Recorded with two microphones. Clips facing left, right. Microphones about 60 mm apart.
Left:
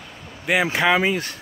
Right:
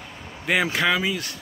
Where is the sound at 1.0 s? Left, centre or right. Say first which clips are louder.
Left 5 dB; left.